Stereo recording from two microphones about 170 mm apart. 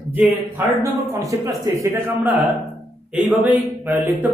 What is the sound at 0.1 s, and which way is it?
Speech, 10° right (ahead or behind).